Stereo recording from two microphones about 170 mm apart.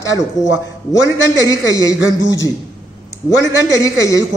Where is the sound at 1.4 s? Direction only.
20° left (ahead or behind).